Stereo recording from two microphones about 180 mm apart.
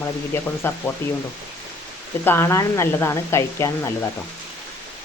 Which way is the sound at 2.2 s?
15° left (ahead or behind).